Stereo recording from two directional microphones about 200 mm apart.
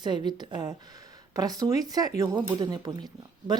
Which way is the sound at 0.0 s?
20° right (ahead or behind).